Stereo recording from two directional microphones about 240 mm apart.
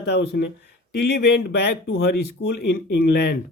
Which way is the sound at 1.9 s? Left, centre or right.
Left.